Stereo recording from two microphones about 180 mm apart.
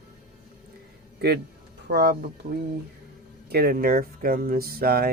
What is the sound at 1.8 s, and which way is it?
Speech, 65° right (ahead or behind).